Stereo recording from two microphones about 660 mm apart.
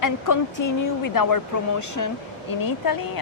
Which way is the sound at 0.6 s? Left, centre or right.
Left.